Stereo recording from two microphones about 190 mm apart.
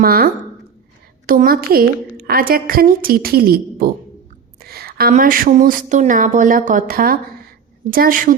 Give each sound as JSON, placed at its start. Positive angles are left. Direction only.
{"t": 0.0, "sound": "a woman's voice", "side_deg": -50}
{"t": 1.3, "sound": "a woman's voice", "side_deg": -50}